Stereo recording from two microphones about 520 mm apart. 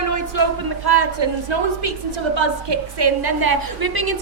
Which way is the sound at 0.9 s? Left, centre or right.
Right.